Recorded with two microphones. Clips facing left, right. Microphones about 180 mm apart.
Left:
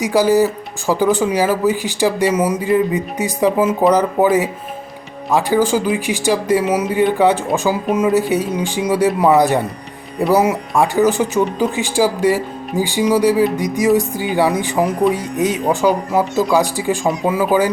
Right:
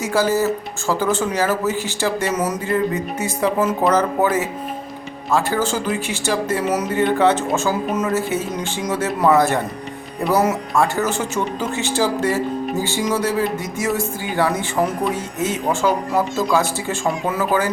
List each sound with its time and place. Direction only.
0.0 s speech: 15° left (ahead or behind)